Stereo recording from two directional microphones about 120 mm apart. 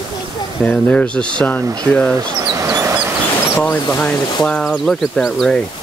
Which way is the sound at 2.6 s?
30° right (ahead or behind).